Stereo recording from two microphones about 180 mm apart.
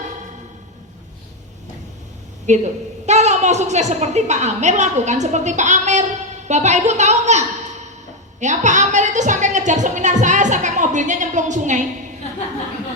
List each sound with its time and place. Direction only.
2.5 s a woman's voice: 40° right (ahead or behind)